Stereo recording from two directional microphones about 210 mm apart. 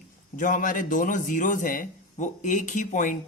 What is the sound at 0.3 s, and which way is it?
Speech, 40° left (ahead or behind).